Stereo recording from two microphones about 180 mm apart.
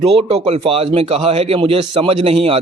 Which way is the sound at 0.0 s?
30° right (ahead or behind).